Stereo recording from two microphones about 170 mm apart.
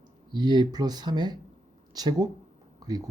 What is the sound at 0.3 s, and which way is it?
Speech, 25° right (ahead or behind).